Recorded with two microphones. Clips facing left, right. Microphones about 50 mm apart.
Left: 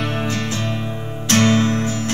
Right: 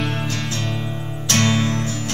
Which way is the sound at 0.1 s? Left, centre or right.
Centre.